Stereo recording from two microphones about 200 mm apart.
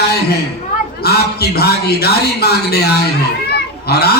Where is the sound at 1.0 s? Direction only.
50° left (ahead or behind).